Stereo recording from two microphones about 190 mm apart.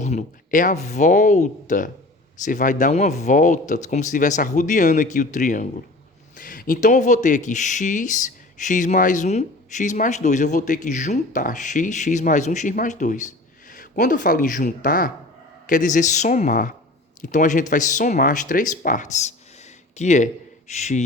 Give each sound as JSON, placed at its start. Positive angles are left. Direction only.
{"t": 0.0, "sound": "a man's voice", "side_deg": 40}